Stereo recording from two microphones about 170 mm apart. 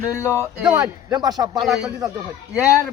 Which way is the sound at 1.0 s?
25° right (ahead or behind).